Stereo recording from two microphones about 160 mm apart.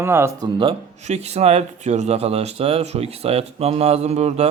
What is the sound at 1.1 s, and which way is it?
Speech, 40° right (ahead or behind).